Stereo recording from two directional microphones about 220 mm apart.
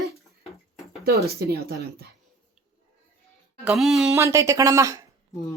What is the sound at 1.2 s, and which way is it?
Speech, 45° right (ahead or behind).